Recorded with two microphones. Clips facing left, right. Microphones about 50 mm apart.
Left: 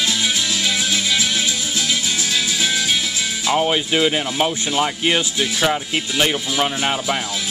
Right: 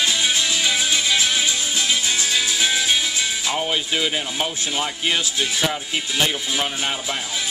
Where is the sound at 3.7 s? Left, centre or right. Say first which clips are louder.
Left 5 dB; centre.